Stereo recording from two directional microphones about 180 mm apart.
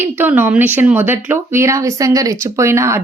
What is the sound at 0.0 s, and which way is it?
Speech, 10° right (ahead or behind).